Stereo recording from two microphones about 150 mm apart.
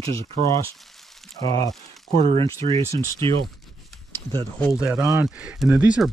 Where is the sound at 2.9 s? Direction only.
20° left (ahead or behind).